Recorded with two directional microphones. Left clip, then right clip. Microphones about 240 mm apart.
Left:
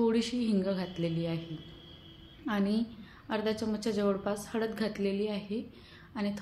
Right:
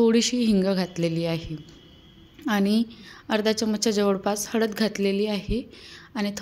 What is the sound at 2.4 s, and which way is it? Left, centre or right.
A woman's voice, right.